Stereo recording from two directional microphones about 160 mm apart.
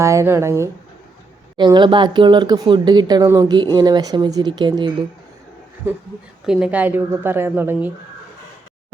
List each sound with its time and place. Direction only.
0.0 s speech: 20° right (ahead or behind)
1.5 s speech: 30° right (ahead or behind)
6.4 s speech: 5° right (ahead or behind)